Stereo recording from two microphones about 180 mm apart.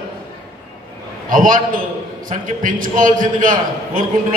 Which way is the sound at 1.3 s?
50° right (ahead or behind).